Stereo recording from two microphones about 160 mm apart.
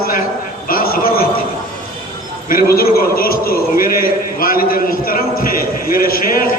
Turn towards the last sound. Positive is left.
turn(degrees=60)  # may be behind; listen again after turning